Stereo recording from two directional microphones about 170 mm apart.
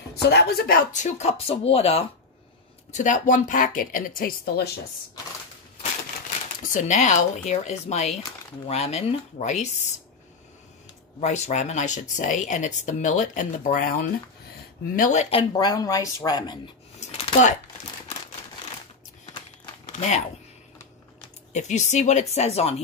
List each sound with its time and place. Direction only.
0.1 s speech: 75° left (ahead or behind); by 2.0 s 35° left (ahead or behind)
2.9 s speech: 45° left (ahead or behind)
6.6 s speech: 45° left (ahead or behind)
11.1 s speech: 40° left (ahead or behind)
15.0 s speech: 45° left (ahead or behind)
15.5 s speech: 20° left (ahead or behind)
17.0 s a sound: 40° left (ahead or behind)
21.5 s speech: 45° left (ahead or behind)